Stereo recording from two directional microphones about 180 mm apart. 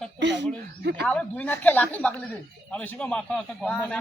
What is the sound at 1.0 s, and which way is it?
A man's voice, 5° left (ahead or behind).